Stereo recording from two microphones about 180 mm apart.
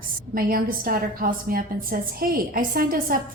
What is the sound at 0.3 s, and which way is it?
A woman's voice, 55° right (ahead or behind).